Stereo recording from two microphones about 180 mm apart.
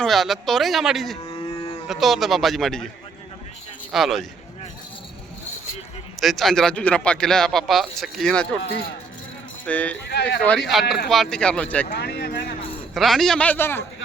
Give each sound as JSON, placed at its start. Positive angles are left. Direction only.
{"t": 0.0, "sound": "speech", "side_deg": 0}
{"t": 1.4, "sound": "cattle", "side_deg": 30}
{"t": 1.9, "sound": "speech", "side_deg": 0}
{"t": 3.9, "sound": "speech", "side_deg": 0}
{"t": 6.1, "sound": "speech", "side_deg": 0}
{"t": 9.6, "sound": "speech", "side_deg": 10}
{"t": 10.1, "sound": "speech", "side_deg": 65}
{"t": 10.7, "sound": "speech", "side_deg": 0}
{"t": 11.9, "sound": "a sound", "side_deg": 65}
{"t": 12.9, "sound": "speech", "side_deg": 0}